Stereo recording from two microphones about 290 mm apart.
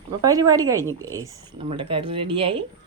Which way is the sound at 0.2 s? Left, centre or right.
Centre.